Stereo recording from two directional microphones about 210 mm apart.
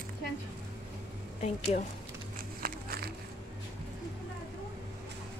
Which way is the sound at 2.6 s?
45° right (ahead or behind).